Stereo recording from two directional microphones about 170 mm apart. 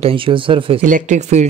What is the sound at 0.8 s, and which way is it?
Speech, 45° right (ahead or behind).